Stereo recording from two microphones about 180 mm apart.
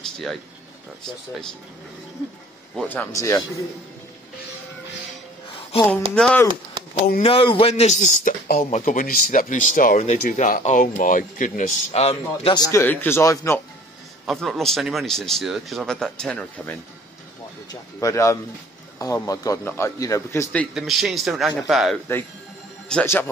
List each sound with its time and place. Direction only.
2.9 s a man's voice: 15° left (ahead or behind)
5.7 s speech: 35° left (ahead or behind)
6.1 s speech: 5° left (ahead or behind)
7.2 s speech: 30° left (ahead or behind)
12.5 s a man's voice: 20° left (ahead or behind)
14.2 s speech: centre (ahead or behind)
17.6 s a man's voice: 20° left (ahead or behind)
20.7 s a man's voice: centre (ahead or behind)